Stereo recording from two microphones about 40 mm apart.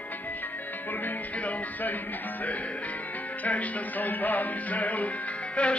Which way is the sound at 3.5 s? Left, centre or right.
Left.